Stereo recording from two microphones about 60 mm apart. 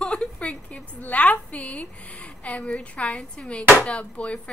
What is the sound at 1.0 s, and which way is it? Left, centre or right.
A woman's voice, left.